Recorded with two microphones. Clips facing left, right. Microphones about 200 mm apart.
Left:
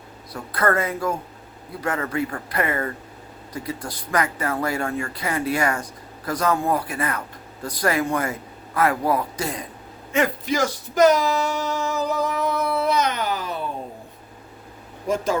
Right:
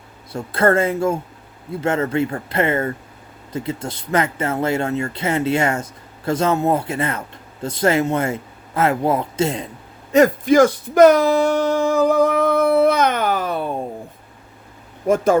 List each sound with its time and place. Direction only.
0.3 s speech: 25° right (ahead or behind)
10.1 s music: 40° right (ahead or behind)
15.0 s speech: 55° right (ahead or behind)